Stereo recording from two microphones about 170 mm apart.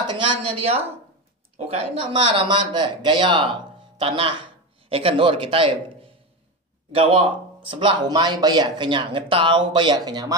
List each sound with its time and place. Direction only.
0.1 s a man's voice: 35° right (ahead or behind)
6.9 s speech: 35° right (ahead or behind)